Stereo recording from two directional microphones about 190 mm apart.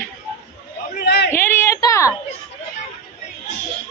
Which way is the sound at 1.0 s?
60° left (ahead or behind).